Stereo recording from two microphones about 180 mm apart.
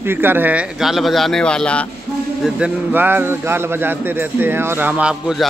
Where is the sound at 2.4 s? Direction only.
10° right (ahead or behind).